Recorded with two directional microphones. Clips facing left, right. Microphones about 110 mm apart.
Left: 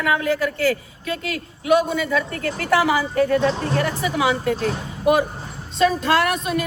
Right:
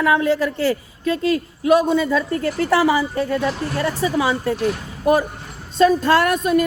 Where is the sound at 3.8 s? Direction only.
30° right (ahead or behind).